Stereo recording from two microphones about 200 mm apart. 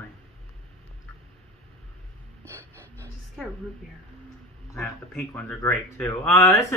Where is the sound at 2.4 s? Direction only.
10° left (ahead or behind).